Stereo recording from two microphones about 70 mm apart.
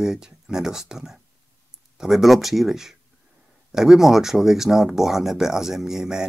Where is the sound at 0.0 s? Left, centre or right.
Centre.